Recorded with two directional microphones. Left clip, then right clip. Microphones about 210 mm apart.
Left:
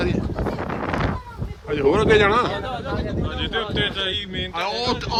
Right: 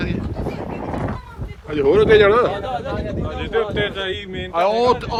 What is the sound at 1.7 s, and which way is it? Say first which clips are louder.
Speech: right 4 dB; 15° left (ahead or behind).